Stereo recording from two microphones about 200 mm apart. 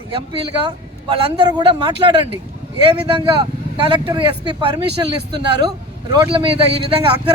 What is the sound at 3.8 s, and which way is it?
A man's voice, 25° right (ahead or behind).